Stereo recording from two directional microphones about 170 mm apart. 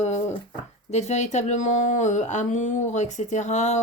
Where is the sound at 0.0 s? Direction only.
40° left (ahead or behind).